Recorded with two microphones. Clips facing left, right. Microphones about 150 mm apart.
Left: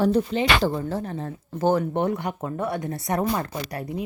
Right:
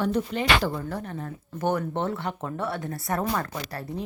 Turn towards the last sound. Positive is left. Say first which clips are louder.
# left 2 dB
turn(degrees=15)  # may be behind; listen again after turning